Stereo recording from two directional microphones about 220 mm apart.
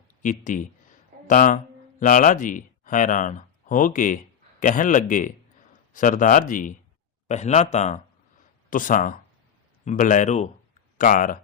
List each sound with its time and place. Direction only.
0.2 s speech: 35° left (ahead or behind)